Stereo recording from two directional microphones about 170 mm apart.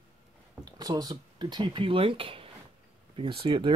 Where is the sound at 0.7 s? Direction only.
20° right (ahead or behind).